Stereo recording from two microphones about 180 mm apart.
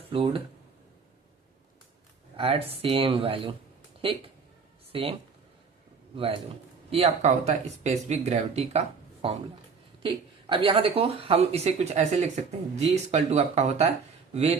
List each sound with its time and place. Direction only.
0.1 s a woman's voice: 30° right (ahead or behind)
2.3 s a woman's voice: 30° right (ahead or behind)
6.1 s a man's voice: 30° right (ahead or behind)